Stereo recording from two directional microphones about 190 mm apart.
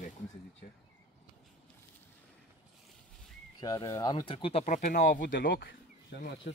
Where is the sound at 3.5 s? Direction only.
20° left (ahead or behind); by 5.2 s 40° left (ahead or behind).